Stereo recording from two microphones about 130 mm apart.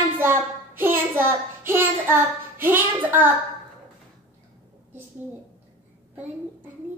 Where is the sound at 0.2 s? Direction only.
15° right (ahead or behind).